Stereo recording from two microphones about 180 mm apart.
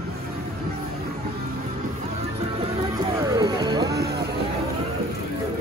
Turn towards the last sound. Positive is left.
turn(degrees=-65)  # may be behind; listen again after turning